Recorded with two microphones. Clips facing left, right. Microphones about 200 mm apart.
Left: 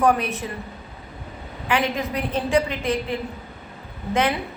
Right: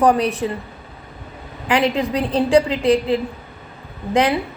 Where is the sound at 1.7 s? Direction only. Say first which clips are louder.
Right 5 dB; 35° right (ahead or behind).